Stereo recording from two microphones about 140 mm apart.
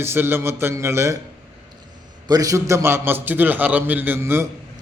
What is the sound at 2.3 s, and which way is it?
A man's voice, 25° right (ahead or behind).